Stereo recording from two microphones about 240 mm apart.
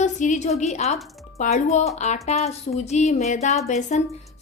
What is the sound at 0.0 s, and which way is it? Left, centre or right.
A woman's voice, left.